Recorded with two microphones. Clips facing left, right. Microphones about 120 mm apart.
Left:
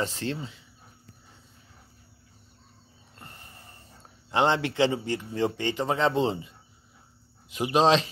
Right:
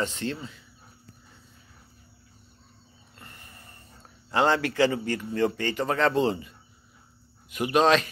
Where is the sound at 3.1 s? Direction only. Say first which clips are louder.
Left 1 dB; 30° left (ahead or behind).